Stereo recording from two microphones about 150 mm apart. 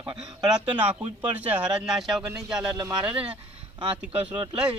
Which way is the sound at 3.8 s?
30° right (ahead or behind).